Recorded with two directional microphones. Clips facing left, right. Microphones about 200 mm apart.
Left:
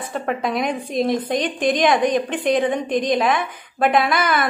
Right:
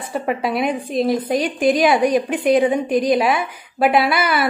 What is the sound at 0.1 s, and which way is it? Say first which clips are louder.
A woman's voice: right 2 dB; 5° right (ahead or behind).